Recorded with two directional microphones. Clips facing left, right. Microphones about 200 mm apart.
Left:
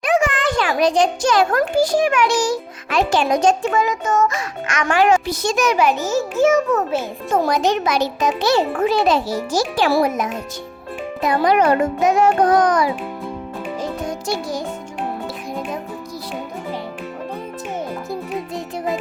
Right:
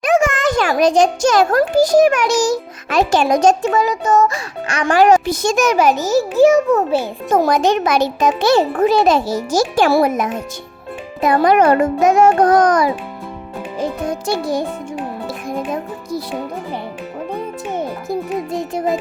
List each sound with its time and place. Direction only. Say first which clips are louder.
0.0 s a child's voice: right 3 dB; 45° right (ahead or behind)
13.7 s music: right 6 dB; 55° right (ahead or behind)
18.5 s music: right 6 dB; 50° right (ahead or behind)